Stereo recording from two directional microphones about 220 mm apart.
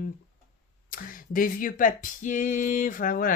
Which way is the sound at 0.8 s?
40° left (ahead or behind).